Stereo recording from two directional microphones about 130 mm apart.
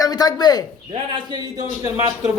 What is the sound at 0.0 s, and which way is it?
Speech, 30° left (ahead or behind).